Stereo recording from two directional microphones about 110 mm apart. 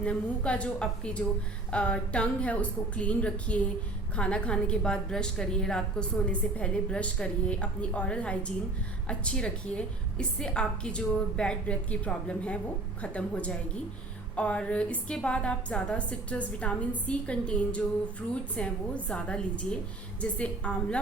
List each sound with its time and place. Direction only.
0.0 s a woman's voice: 10° left (ahead or behind)